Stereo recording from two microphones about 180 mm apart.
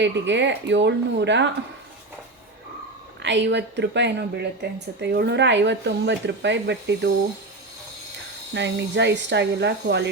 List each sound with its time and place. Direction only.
0.0 s speech: 80° right
3.2 s speech: 80° right
8.5 s speech: 75° right (ahead or behind)